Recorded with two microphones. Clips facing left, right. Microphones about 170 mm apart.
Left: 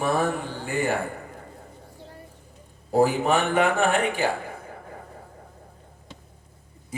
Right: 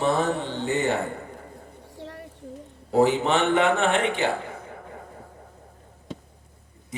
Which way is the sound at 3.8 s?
20° right (ahead or behind).